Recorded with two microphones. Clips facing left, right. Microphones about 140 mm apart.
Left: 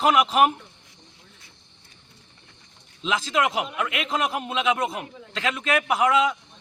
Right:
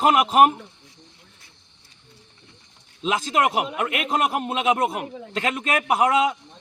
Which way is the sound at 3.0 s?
45° right (ahead or behind).